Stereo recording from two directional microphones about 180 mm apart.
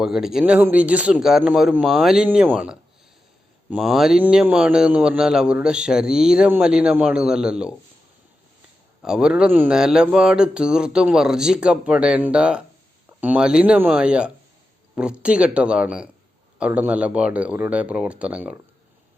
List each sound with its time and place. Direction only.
0.0 s speech: centre (ahead or behind)
9.0 s speech: 5° right (ahead or behind)